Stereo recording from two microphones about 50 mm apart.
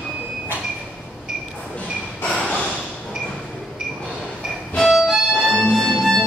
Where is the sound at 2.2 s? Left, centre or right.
Centre.